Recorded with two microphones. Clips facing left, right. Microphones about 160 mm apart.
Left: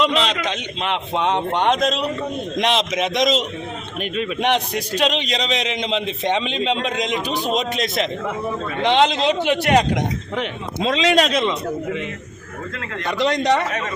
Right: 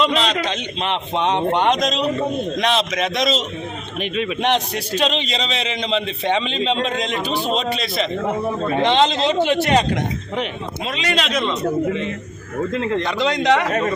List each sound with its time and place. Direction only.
0.0 s a man's voice: 20° left (ahead or behind)
0.8 s speech: 5° left (ahead or behind)
2.6 s a man's voice: 20° left (ahead or behind)
4.0 s a man's voice: 40° left (ahead or behind)
4.4 s a man's voice: 10° left (ahead or behind)
8.3 s speech: 40° right (ahead or behind)
8.8 s a man's voice: 10° left (ahead or behind)
10.8 s a man's voice: 90° left
12.7 s speech: 25° right (ahead or behind)
13.7 s speech: 40° right (ahead or behind)